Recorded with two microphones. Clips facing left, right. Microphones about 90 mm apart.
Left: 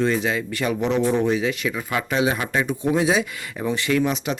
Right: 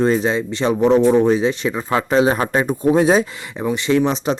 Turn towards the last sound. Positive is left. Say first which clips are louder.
# right 5 dB
turn(degrees=-30)  # may be behind; listen again after turning